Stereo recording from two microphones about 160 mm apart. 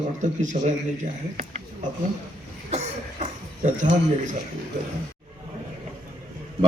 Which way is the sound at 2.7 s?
50° right (ahead or behind).